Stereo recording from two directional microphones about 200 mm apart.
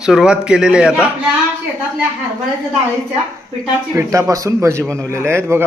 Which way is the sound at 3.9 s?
15° right (ahead or behind).